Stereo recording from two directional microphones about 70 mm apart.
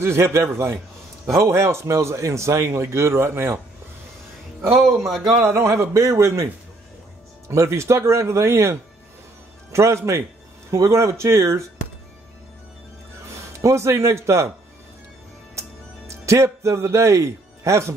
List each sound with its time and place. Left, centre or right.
0.0 s a man's voice: right
5.4 s a man's voice: right
13.6 s speech: right
16.1 s speech: right